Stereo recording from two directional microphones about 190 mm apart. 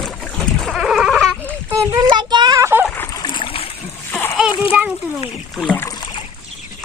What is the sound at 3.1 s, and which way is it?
Splash, 20° left (ahead or behind).